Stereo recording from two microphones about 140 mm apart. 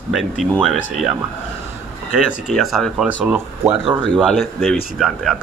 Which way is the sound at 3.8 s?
40° right (ahead or behind).